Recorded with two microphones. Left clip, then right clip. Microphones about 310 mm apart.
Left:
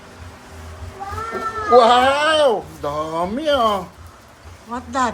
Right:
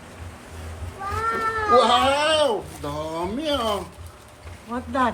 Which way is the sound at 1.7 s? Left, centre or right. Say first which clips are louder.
Left 6 dB; left.